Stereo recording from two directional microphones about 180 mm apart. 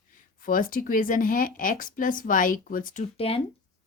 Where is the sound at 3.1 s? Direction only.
30° left (ahead or behind).